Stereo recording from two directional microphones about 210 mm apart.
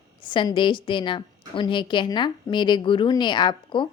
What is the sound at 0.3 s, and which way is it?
A woman's voice, 20° left (ahead or behind).